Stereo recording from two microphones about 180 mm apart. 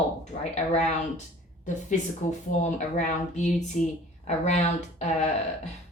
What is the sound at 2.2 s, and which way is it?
Speech, 45° left (ahead or behind).